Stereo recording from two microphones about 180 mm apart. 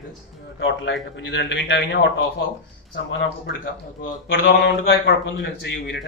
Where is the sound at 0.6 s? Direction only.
90° left.